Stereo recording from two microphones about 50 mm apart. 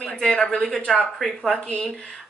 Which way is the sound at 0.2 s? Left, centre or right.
Centre.